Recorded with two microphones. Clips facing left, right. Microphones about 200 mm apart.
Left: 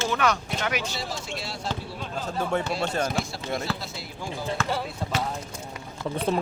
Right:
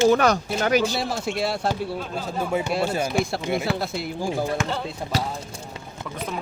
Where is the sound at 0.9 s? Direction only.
60° right (ahead or behind).